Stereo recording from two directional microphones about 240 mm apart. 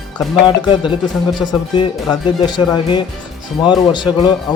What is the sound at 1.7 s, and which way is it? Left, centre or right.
Speech, centre.